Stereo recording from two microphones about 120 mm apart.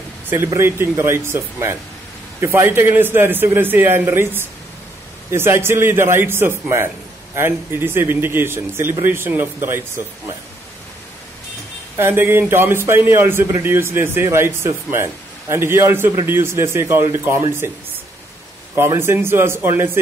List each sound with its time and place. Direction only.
0.3 s a man's voice: 20° right (ahead or behind)
12.0 s a man's voice: 20° right (ahead or behind)
18.8 s a man's voice: 20° right (ahead or behind)